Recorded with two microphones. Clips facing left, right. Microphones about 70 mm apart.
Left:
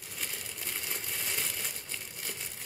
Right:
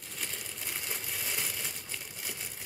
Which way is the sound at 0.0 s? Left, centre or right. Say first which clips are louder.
Even; centre.